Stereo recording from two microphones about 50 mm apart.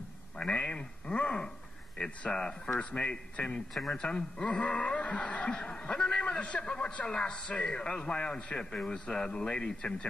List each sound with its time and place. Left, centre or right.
0.4 s a man's voice: centre